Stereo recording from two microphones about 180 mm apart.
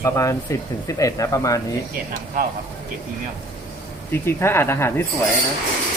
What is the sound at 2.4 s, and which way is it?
Speech, 50° right (ahead or behind).